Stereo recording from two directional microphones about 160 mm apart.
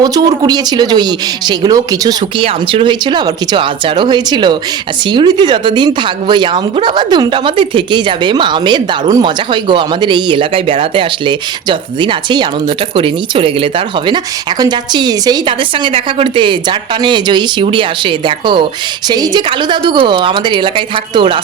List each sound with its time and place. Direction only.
0.0 s a woman's voice: 25° right (ahead or behind)